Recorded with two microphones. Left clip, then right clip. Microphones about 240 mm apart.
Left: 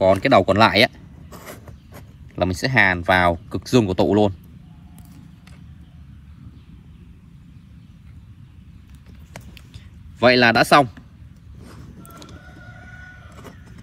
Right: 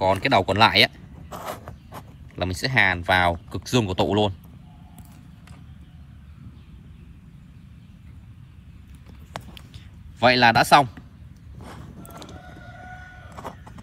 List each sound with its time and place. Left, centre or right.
0.0 s speech: centre
1.3 s a sound: centre
2.3 s speech: centre
10.1 s speech: centre